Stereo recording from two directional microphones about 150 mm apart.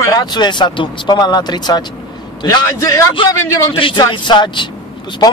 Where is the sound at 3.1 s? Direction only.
35° left (ahead or behind).